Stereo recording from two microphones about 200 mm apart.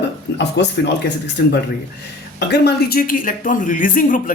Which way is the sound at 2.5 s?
50° left (ahead or behind).